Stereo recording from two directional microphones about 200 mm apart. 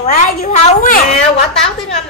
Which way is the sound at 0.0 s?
40° left (ahead or behind).